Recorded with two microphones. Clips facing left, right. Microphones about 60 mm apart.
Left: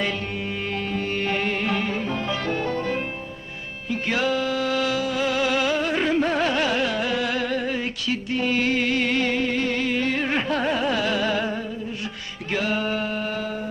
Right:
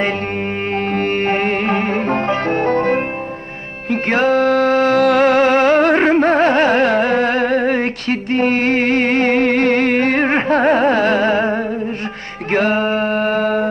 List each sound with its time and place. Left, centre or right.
0.7 s music: right
12.4 s mantra: right